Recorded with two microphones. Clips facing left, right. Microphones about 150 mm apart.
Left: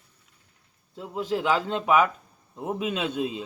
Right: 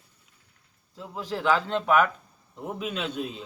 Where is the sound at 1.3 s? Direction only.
15° left (ahead or behind).